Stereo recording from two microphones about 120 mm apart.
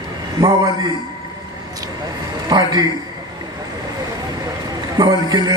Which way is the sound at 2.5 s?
35° right (ahead or behind).